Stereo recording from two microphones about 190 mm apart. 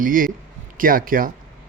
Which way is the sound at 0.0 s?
45° right (ahead or behind).